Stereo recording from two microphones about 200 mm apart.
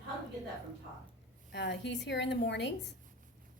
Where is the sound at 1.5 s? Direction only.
60° left (ahead or behind).